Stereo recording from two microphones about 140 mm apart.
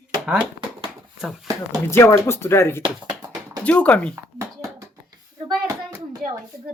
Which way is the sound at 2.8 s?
30° right (ahead or behind).